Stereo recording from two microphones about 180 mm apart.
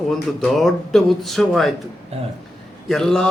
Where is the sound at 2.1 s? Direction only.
35° right (ahead or behind).